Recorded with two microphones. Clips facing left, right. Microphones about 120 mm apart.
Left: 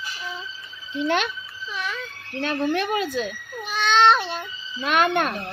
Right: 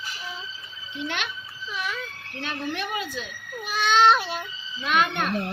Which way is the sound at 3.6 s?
5° right (ahead or behind).